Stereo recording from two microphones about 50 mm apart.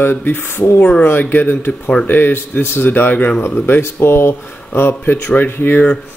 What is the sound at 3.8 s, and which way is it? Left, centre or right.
A man's voice, left.